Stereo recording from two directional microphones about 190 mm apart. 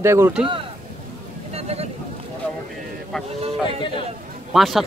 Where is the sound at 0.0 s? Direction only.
15° right (ahead or behind).